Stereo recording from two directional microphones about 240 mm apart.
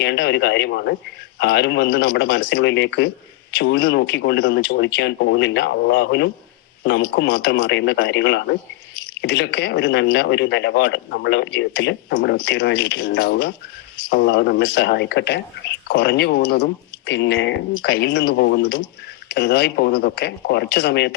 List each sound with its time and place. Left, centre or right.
0.0 s speech: left
19.3 s speech: left